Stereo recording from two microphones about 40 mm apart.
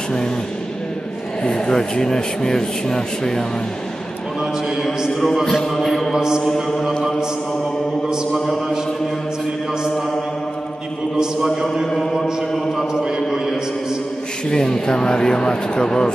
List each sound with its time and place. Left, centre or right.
1.4 s speech: centre
4.4 s a man's voice: centre
5.2 s speech: centre
5.7 s a sound: centre
6.1 s a man's voice: centre
6.4 s speech: centre
11.9 s a sound: centre
14.5 s speech: centre